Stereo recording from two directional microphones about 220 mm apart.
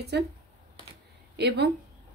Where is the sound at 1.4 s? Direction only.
50° right (ahead or behind).